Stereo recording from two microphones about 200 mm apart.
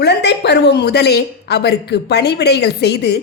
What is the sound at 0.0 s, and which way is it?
A woman's voice, 55° left (ahead or behind).